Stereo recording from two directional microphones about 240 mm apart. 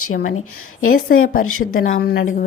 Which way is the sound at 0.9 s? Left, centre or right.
Left.